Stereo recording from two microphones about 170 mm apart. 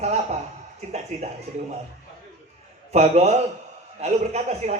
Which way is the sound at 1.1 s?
40° right (ahead or behind).